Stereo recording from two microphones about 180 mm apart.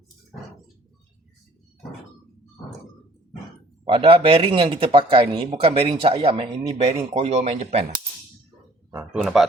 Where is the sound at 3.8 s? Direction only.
30° right (ahead or behind).